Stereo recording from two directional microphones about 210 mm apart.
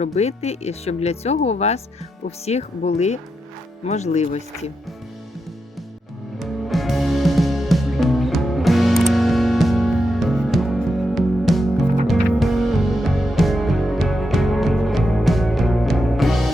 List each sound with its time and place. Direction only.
0.0 s speech: 30° left (ahead or behind)
6.4 s music: centre (ahead or behind)